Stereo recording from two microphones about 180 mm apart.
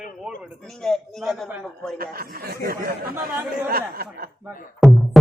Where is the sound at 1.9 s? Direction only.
55° right (ahead or behind).